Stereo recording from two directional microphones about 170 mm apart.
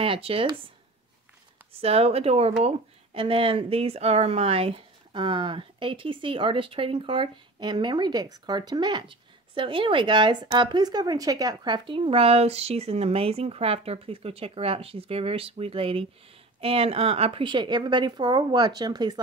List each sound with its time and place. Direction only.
0.0 s speech: 35° right (ahead or behind)
1.7 s a woman's voice: 35° right (ahead or behind)